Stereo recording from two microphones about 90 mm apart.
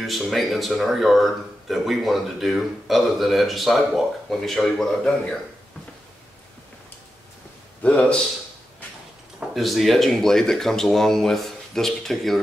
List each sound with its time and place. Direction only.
0.0 s speech: centre (ahead or behind)
7.8 s a man's voice: 15° left (ahead or behind)
9.5 s speech: centre (ahead or behind)